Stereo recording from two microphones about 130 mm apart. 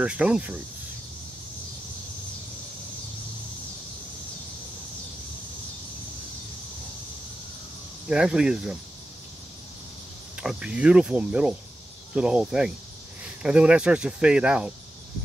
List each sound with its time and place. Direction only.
0.0 s speech: 10° right (ahead or behind)
8.1 s speech: 5° right (ahead or behind)
10.3 s speech: 5° right (ahead or behind)